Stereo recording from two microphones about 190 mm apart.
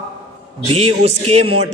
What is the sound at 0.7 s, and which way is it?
Speech, 35° right (ahead or behind).